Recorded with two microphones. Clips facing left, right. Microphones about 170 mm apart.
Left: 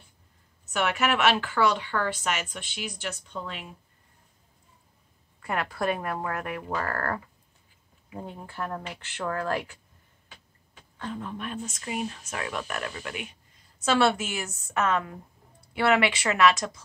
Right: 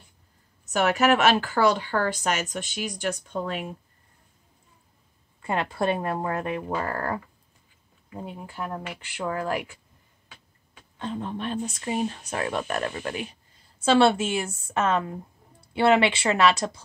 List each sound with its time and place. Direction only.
0.7 s speech: 40° right (ahead or behind)
5.4 s speech: 25° right (ahead or behind)
8.2 s speech: 10° right (ahead or behind)
11.0 s speech: 25° right (ahead or behind)